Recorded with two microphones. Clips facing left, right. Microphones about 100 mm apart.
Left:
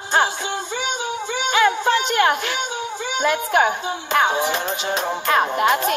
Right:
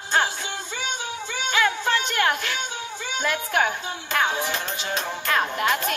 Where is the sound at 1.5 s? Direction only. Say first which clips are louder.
Left 5 dB; 20° left (ahead or behind).